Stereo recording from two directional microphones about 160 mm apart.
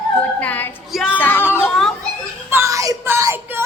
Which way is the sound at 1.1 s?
10° left (ahead or behind).